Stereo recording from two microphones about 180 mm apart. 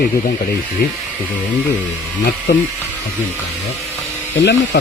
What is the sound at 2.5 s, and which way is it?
Speech, 65° left (ahead or behind).